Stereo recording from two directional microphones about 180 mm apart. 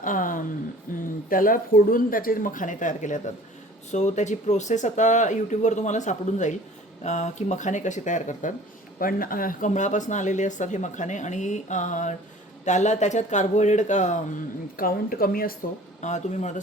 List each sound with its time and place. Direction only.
0.0 s speech: 50° left (ahead or behind)
14.8 s speech: 55° left (ahead or behind)
16.0 s speech: 40° left (ahead or behind)